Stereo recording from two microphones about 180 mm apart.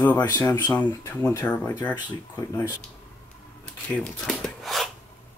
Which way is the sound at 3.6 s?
5° left (ahead or behind).